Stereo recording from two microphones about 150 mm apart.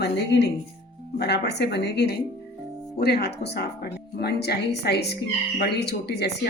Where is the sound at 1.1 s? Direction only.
90° left.